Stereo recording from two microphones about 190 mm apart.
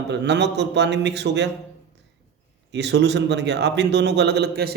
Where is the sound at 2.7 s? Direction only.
65° right (ahead or behind).